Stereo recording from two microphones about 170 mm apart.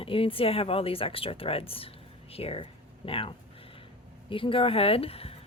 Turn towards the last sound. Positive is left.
turn(degrees=35)  # may be behind; listen again after turning